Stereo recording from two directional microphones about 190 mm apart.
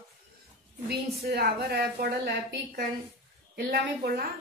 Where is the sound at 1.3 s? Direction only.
55° right (ahead or behind).